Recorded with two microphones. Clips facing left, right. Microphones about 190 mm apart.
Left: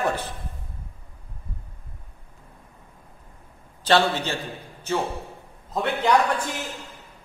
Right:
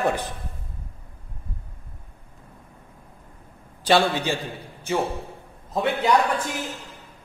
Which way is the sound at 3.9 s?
15° right (ahead or behind).